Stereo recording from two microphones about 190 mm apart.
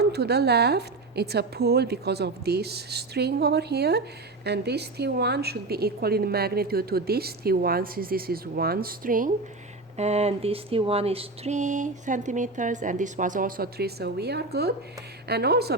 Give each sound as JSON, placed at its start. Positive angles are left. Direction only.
{"t": 0.0, "sound": "a woman's voice", "side_deg": -60}
{"t": 10.0, "sound": "a sound", "side_deg": -35}
{"t": 15.3, "sound": "a woman's voice", "side_deg": -60}